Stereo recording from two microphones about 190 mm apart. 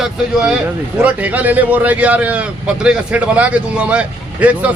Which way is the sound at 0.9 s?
5° right (ahead or behind).